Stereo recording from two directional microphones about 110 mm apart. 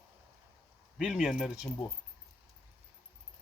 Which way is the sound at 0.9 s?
5° right (ahead or behind).